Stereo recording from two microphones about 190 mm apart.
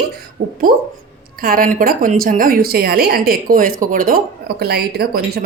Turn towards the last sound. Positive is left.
turn(degrees=-55)  # may be behind; listen again after turning